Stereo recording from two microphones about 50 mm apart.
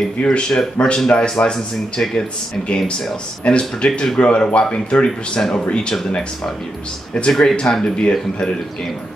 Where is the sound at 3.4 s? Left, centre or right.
Left.